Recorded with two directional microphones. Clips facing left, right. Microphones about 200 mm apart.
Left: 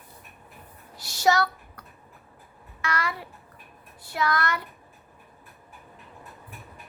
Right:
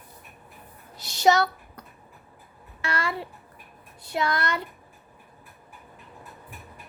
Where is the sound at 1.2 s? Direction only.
20° right (ahead or behind).